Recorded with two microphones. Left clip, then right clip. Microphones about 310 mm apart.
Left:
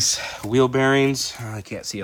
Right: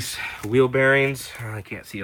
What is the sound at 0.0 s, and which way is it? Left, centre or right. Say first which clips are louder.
Speech: left 6 dB; centre.